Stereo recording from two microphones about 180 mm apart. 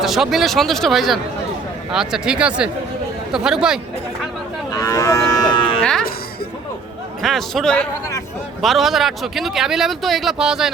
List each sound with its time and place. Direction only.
0.0 s speech: centre (ahead or behind)
4.7 s cattle: 20° left (ahead or behind)
5.8 s music: 5° left (ahead or behind)
7.2 s speech: centre (ahead or behind)